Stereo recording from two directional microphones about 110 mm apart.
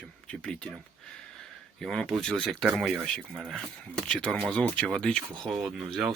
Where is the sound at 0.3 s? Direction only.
10° left (ahead or behind).